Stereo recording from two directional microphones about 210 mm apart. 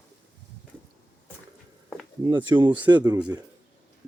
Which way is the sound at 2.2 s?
20° right (ahead or behind).